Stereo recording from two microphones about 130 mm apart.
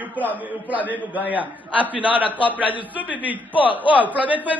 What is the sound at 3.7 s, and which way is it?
Speech, 40° left (ahead or behind).